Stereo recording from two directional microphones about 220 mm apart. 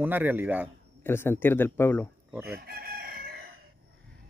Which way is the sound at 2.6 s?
45° right (ahead or behind).